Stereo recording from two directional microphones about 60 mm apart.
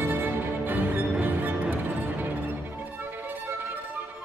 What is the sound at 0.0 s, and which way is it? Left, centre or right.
Music, right.